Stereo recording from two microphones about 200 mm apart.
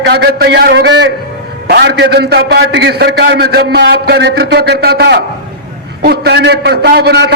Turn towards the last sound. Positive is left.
turn(degrees=-55)  # may be behind; listen again after turning